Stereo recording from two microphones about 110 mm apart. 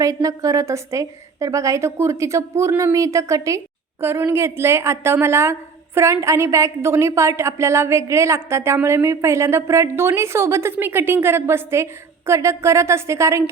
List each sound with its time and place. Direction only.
0.0 s a woman's voice: 30° right (ahead or behind)